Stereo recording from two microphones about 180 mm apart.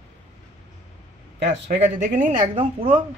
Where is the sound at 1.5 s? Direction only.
75° right (ahead or behind).